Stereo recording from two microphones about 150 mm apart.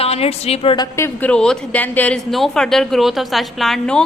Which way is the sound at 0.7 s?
25° left (ahead or behind).